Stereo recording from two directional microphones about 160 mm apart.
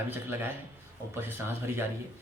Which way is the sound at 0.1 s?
15° right (ahead or behind).